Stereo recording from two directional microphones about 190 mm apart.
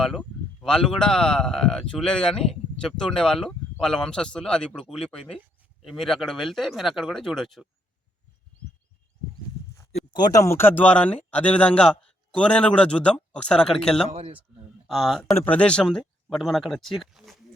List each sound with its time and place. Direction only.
0.0 s a man's voice: 5° left (ahead or behind)
9.7 s a man's voice: 15° left (ahead or behind)
14.1 s speech: 35° right (ahead or behind)
14.8 s a man's voice: centre (ahead or behind)